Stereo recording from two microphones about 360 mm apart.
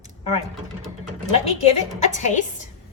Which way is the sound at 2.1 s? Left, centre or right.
Centre.